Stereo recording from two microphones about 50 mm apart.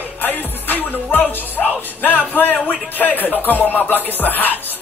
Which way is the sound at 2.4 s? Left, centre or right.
Left.